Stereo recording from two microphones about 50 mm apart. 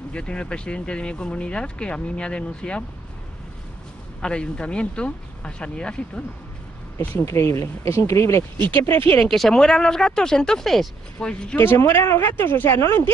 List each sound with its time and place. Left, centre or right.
0.1 s speech: left
4.2 s speech: centre
7.2 s speech: left
8.5 s speech: left
8.8 s speech: left
9.2 s speech: centre
11.1 s speech: centre
11.5 s speech: left
12.2 s speech: left